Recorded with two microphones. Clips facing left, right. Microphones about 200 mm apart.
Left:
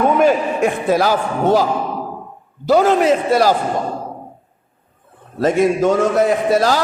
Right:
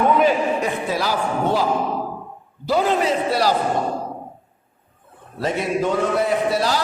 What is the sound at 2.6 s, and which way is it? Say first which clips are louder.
Speech: left 6 dB; 45° left (ahead or behind).